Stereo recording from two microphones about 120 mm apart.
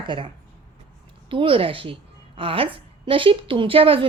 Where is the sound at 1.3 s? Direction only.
45° right (ahead or behind).